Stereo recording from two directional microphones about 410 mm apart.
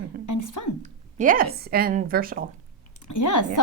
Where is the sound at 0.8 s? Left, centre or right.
Centre.